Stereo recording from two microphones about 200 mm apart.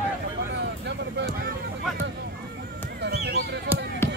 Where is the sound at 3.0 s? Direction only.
55° right (ahead or behind).